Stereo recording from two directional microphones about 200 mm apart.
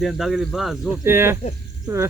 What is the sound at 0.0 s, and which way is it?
Cricket, centre (ahead or behind).